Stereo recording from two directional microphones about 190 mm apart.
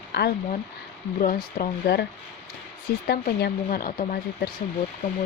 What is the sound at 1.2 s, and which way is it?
Speech, 45° left (ahead or behind).